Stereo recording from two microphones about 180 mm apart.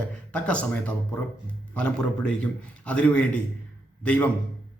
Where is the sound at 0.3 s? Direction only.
5° left (ahead or behind).